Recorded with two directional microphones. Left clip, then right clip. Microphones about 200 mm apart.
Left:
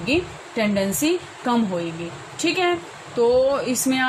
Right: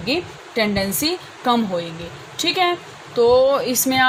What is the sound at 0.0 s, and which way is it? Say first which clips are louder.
Speech: even; 50° right (ahead or behind).